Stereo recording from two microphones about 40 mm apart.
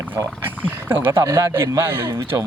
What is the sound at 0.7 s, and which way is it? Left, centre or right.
Speech, right.